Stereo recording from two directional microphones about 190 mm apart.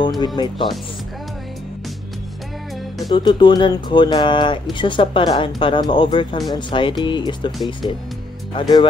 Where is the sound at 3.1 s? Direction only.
25° left (ahead or behind).